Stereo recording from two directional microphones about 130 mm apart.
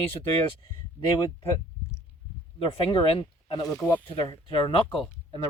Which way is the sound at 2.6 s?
45° left (ahead or behind).